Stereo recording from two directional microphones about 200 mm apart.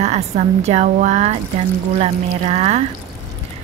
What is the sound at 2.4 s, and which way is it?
Speech, 30° right (ahead or behind).